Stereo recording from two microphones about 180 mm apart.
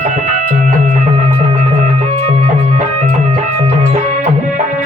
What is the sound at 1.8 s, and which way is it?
Music, 35° right (ahead or behind).